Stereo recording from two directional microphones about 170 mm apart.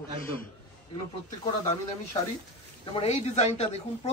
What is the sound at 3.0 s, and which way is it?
Speech, 40° left (ahead or behind).